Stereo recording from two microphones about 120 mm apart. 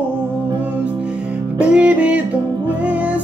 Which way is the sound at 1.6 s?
10° right (ahead or behind).